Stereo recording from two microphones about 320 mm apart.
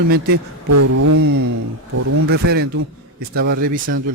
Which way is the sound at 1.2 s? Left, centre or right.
Right.